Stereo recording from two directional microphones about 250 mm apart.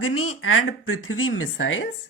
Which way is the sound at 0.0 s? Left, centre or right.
Left.